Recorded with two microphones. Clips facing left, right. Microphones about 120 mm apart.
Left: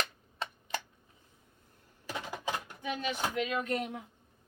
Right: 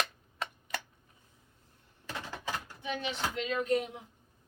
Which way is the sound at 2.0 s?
15° left (ahead or behind).